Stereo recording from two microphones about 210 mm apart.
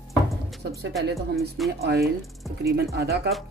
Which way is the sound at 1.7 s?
50° right (ahead or behind).